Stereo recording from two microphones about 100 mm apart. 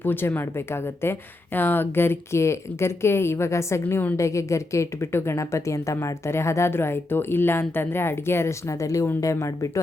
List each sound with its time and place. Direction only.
0.0 s a woman's voice: 20° left (ahead or behind)